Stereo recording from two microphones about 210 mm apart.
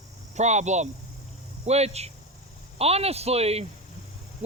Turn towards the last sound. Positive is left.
turn(degrees=-30)  # may be behind; listen again after turning